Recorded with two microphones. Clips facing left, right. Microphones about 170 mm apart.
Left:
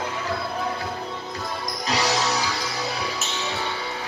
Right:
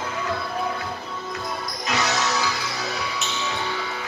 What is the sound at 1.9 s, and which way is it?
Music, 35° left (ahead or behind).